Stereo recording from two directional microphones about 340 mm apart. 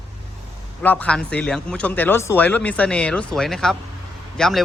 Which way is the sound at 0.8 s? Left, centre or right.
Centre.